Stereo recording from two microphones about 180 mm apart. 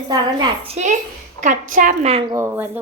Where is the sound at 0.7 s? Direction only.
40° right (ahead or behind).